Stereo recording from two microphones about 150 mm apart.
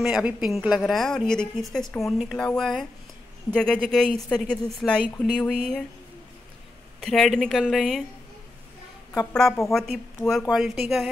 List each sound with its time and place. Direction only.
0.0 s speech: 5° right (ahead or behind)
7.0 s speech: centre (ahead or behind)
9.3 s speech: 5° left (ahead or behind)